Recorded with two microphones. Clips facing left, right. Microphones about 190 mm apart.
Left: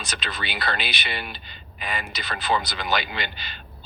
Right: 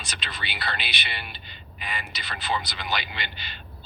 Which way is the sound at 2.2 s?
45° left (ahead or behind).